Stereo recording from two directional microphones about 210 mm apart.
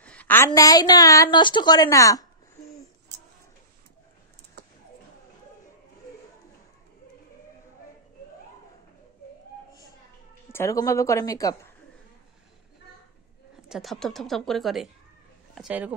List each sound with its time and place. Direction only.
0.0 s a sound: 5° left (ahead or behind)
0.5 s a woman's voice: 15° left (ahead or behind)
10.5 s a woman's voice: 15° left (ahead or behind)
13.6 s a woman's voice: centre (ahead or behind)